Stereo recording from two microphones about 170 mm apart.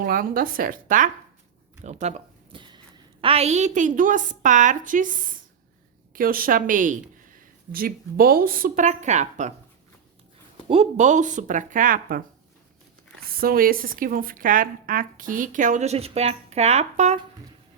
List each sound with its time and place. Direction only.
0.0 s speech: 55° right (ahead or behind)
2.5 s a woman's voice: 25° right (ahead or behind); by 9.5 s 45° right (ahead or behind)
10.7 s speech: 40° right (ahead or behind); by 12.2 s 55° right (ahead or behind)
13.4 s speech: 60° right (ahead or behind); by 17.2 s 40° right (ahead or behind)